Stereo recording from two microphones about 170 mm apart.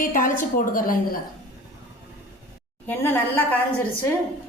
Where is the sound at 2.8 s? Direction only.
10° left (ahead or behind).